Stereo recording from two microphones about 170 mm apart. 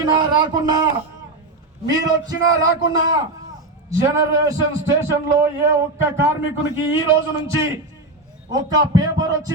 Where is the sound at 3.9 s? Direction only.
20° right (ahead or behind).